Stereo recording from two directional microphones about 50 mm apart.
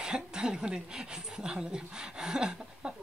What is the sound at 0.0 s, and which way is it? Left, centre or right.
Speech, centre.